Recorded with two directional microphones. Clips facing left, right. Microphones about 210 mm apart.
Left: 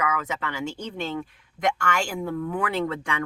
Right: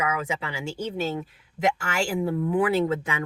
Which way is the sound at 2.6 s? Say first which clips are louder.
Right 7 dB; 5° right (ahead or behind).